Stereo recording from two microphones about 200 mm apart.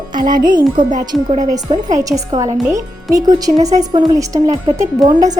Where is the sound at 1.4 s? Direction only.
20° right (ahead or behind).